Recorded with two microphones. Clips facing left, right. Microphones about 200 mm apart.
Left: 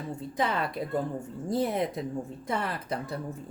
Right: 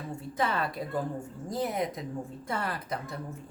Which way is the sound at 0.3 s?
20° left (ahead or behind).